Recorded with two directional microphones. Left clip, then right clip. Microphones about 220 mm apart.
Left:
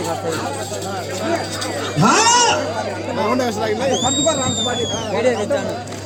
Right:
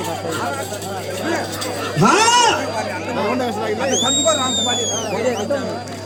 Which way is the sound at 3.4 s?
50° left (ahead or behind).